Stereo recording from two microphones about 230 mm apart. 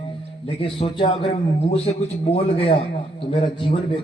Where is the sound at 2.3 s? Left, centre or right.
Left.